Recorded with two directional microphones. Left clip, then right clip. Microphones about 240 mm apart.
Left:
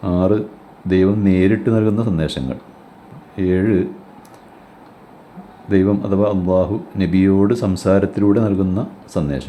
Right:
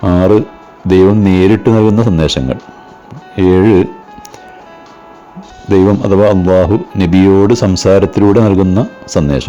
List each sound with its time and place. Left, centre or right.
0.0 s speech: right
5.6 s speech: right